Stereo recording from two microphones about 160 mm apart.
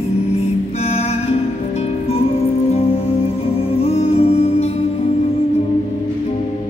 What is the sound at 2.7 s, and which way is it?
Music, 35° left (ahead or behind).